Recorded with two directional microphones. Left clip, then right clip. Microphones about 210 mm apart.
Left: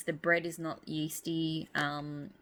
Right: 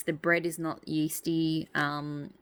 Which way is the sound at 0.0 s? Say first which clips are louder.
Right 3 dB; 50° right (ahead or behind).